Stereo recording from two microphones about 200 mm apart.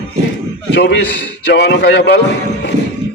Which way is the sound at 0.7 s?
55° left (ahead or behind).